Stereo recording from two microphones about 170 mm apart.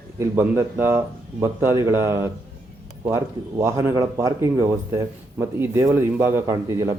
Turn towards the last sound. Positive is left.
turn(degrees=-20)  # may be behind; listen again after turning